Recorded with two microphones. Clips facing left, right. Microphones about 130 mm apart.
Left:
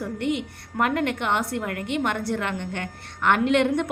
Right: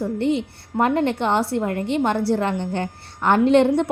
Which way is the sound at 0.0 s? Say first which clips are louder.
Right 5 dB; 30° right (ahead or behind).